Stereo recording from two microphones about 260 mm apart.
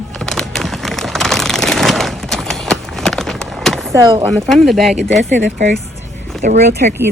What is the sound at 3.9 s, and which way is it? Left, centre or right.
Speech, centre.